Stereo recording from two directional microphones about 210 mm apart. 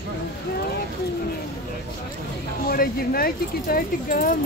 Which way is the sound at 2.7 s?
45° left (ahead or behind).